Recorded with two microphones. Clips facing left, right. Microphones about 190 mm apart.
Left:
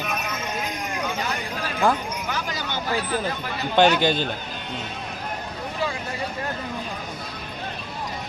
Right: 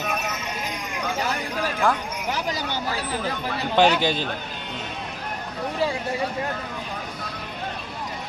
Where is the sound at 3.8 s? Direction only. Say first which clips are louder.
Left 1 dB; 5° right (ahead or behind).